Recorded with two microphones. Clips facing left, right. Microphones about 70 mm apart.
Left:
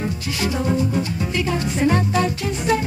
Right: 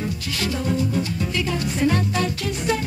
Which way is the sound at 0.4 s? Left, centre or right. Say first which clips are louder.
Left 3 dB; left.